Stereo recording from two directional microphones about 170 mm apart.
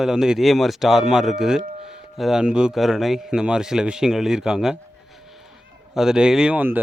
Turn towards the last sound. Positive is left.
turn(degrees=-10)  # may be behind; listen again after turning